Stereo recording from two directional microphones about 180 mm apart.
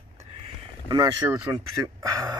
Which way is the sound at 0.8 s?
20° right (ahead or behind).